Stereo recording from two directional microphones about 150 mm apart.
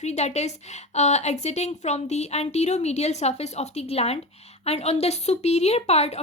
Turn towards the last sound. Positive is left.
turn(degrees=45)  # may be behind; listen again after turning